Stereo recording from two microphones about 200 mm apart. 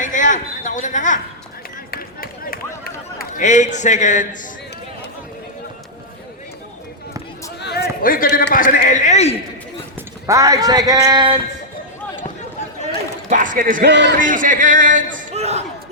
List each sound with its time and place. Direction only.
0.0 s a sound: 40° left (ahead or behind)
1.9 s run: 50° left (ahead or behind)
7.6 s a sound: 55° left (ahead or behind); by 9.3 s 35° left (ahead or behind)
10.2 s a man's voice: 15° right (ahead or behind)
13.3 s a man's voice: 40° right (ahead or behind)
13.9 s a man's voice: 60° right (ahead or behind)
14.2 s a man's voice: 40° right (ahead or behind)